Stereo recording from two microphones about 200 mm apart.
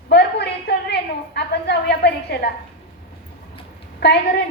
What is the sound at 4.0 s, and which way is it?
Speech, 55° left (ahead or behind).